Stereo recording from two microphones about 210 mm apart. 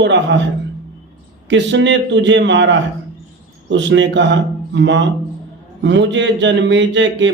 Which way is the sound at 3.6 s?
60° right (ahead or behind).